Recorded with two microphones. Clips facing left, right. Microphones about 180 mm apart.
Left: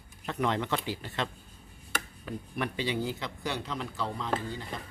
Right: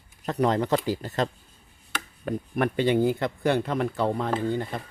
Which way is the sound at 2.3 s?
55° right (ahead or behind).